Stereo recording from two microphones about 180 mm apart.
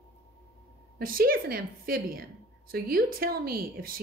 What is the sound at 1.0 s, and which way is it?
A woman's voice, 55° right (ahead or behind).